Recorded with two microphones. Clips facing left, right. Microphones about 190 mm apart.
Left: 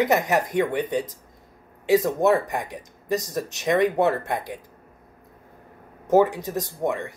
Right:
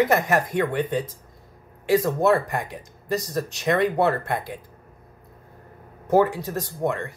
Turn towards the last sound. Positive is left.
turn(degrees=15)  # may be behind; listen again after turning